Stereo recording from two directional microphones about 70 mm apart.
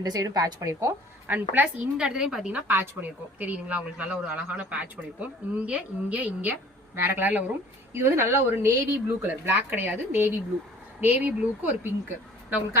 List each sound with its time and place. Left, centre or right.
0.0 s a woman's voice: right
1.3 s speech: right
1.8 s a woman's voice: centre
2.5 s speech: right
7.9 s speech: right